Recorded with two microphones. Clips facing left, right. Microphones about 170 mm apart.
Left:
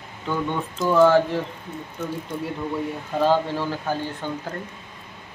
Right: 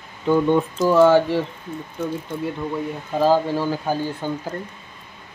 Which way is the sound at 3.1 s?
5° right (ahead or behind).